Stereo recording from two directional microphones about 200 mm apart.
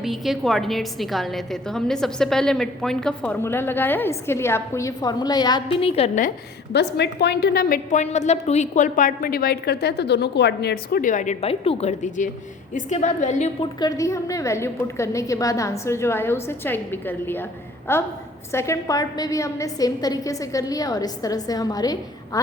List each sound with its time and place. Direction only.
0.0 s a woman's voice: centre (ahead or behind); by 6.2 s 30° left (ahead or behind)
6.7 s a woman's voice: 55° left (ahead or behind); by 13.7 s 35° left (ahead or behind)
13.7 s a woman's voice: 20° left (ahead or behind)